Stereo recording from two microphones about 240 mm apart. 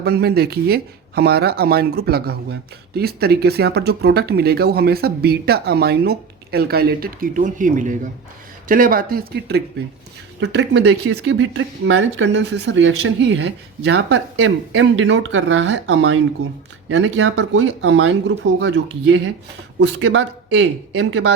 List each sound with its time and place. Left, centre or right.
0.0 s speech: right